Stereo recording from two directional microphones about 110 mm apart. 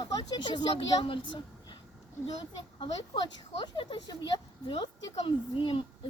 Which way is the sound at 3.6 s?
45° left (ahead or behind).